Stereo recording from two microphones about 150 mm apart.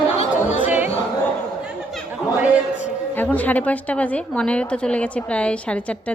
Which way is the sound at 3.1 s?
10° left (ahead or behind).